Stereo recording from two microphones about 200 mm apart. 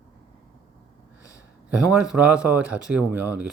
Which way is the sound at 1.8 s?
5° right (ahead or behind).